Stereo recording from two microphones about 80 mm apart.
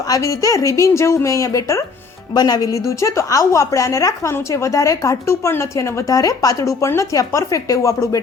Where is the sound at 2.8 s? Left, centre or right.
Left.